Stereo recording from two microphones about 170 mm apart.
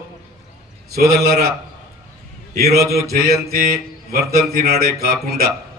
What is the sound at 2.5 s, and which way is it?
Speech, 65° right (ahead or behind).